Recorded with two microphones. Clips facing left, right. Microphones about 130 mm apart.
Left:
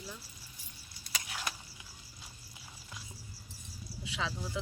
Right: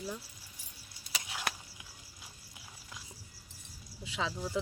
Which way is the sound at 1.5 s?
60° right (ahead or behind).